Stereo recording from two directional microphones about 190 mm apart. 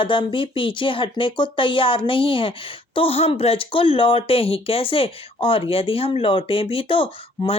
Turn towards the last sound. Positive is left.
turn(degrees=30)  # may be behind; listen again after turning